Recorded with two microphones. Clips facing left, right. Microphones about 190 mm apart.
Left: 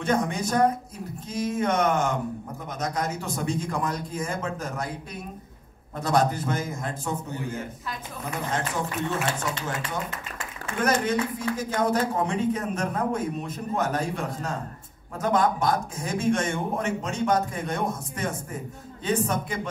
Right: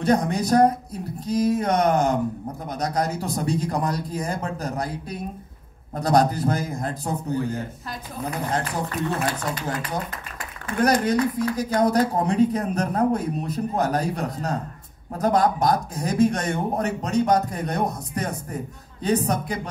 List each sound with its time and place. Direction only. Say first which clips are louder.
0.0 s a woman's voice: right 4 dB; 35° right (ahead or behind)
5.9 s a woman's voice: right 4 dB; 40° right (ahead or behind)
10.8 s a woman's voice: right 4 dB; 40° right (ahead or behind)